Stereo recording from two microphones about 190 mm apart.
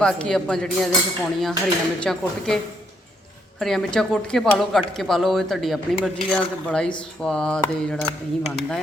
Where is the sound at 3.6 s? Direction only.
Centre (ahead or behind).